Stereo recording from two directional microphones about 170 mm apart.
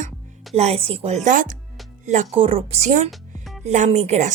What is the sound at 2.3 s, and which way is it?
Speech, 35° right (ahead or behind).